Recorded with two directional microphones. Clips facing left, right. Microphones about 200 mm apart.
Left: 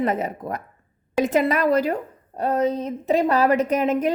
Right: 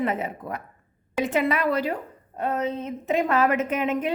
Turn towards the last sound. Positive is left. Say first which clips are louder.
# left 4 dB
turn(degrees=40)  # may be behind; listen again after turning